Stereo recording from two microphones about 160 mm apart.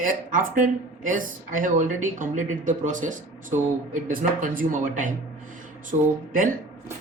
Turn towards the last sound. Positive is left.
turn(degrees=-60)  # may be behind; listen again after turning